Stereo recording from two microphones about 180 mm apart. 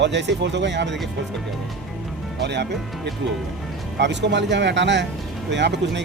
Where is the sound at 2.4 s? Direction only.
70° right (ahead or behind).